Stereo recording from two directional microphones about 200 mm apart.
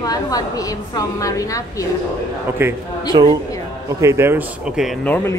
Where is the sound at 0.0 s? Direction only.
20° left (ahead or behind).